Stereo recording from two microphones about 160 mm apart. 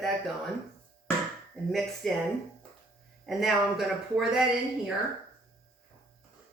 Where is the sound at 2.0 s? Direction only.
Centre (ahead or behind).